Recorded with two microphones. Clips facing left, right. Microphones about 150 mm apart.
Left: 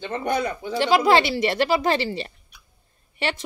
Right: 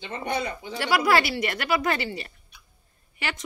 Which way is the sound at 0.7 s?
25° left (ahead or behind).